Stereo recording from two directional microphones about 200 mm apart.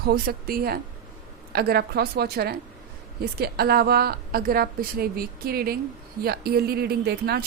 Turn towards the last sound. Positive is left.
turn(degrees=-50)  # may be behind; listen again after turning